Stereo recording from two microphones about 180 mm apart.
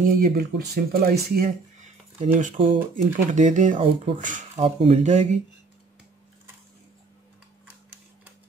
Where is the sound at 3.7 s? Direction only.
30° right (ahead or behind).